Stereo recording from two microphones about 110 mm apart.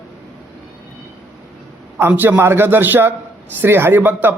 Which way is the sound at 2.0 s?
15° right (ahead or behind).